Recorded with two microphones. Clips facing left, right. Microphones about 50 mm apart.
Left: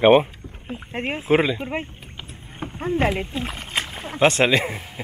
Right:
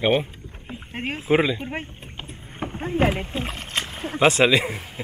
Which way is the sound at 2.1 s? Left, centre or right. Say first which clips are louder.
Right 1 dB; centre.